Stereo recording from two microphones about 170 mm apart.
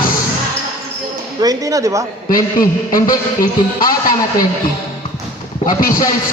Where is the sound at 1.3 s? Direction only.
20° right (ahead or behind).